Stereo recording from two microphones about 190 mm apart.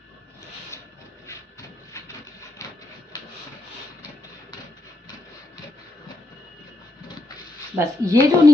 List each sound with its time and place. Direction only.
0.7 s a sound: 15° left (ahead or behind)
2.6 s printer: 15° left (ahead or behind)
7.8 s speech: 15° right (ahead or behind)